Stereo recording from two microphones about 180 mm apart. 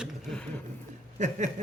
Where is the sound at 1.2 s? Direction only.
40° right (ahead or behind).